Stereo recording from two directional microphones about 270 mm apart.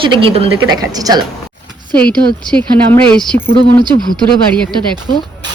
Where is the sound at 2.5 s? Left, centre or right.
Centre.